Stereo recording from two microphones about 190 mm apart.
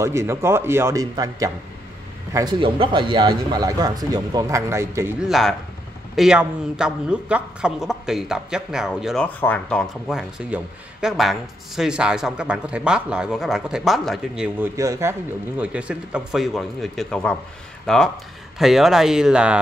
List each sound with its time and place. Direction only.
0.0 s a man's voice: 15° right (ahead or behind)
5.3 s speech: centre (ahead or behind)
14.8 s speech: 15° right (ahead or behind)